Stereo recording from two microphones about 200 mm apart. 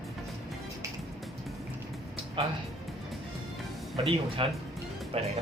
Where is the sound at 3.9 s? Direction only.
30° right (ahead or behind).